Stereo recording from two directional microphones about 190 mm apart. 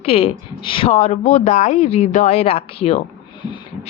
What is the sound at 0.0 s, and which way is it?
Speech, 30° left (ahead or behind).